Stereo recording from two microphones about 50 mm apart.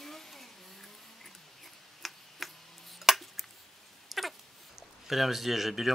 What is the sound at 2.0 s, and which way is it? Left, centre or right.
Tick-tock, centre.